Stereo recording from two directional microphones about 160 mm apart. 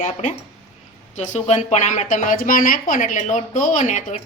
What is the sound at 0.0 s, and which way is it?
A woman's voice, 50° left (ahead or behind).